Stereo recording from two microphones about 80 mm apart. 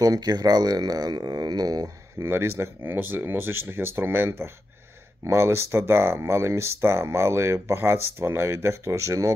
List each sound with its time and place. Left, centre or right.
0.0 s speech: right
2.2 s speech: right